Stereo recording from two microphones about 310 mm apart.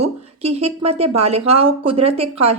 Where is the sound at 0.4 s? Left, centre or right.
Centre.